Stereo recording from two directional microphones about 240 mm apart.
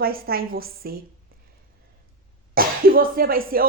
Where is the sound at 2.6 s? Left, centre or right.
Right.